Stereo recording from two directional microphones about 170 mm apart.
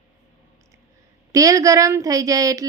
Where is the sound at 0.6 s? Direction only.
20° right (ahead or behind).